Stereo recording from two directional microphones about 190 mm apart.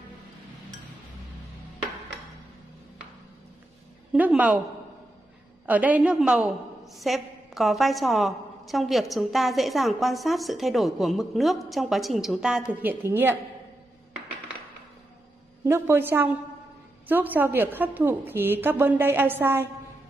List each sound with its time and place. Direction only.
4.1 s a woman's voice: 5° right (ahead or behind)
5.7 s a woman's voice: 10° right (ahead or behind)
15.6 s a woman's voice: 10° right (ahead or behind)